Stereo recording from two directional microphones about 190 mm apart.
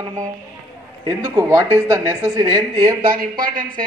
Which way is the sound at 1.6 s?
20° right (ahead or behind).